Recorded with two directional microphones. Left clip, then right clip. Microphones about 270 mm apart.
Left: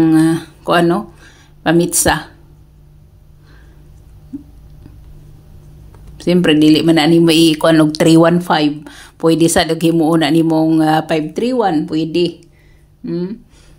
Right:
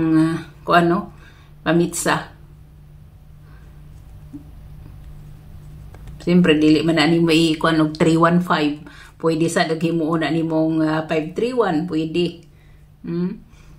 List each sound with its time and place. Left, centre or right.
0.0 s speech: left
6.1 s speech: left